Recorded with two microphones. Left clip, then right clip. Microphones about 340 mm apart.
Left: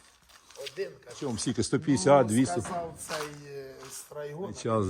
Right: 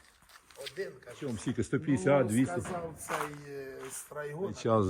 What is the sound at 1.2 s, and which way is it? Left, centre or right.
Speech, centre.